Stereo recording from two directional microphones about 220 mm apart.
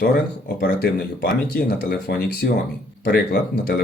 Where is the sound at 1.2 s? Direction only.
40° left (ahead or behind).